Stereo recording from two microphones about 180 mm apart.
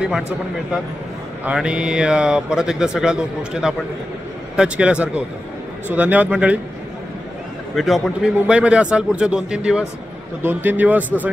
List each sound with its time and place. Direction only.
1.4 s speech: 5° right (ahead or behind)
7.7 s speech: centre (ahead or behind)